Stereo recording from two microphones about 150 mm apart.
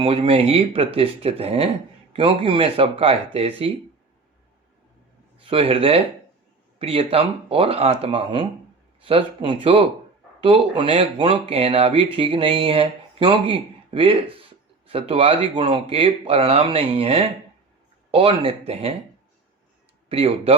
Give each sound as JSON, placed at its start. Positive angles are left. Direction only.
{"t": 0.0, "sound": "speech", "side_deg": -40}
{"t": 5.4, "sound": "speech", "side_deg": -40}
{"t": 20.1, "sound": "speech", "side_deg": -40}